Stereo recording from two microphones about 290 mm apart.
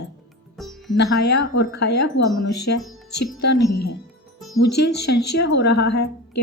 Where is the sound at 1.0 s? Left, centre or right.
Left.